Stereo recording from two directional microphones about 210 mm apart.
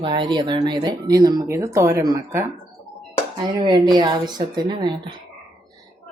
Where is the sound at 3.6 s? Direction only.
20° right (ahead or behind).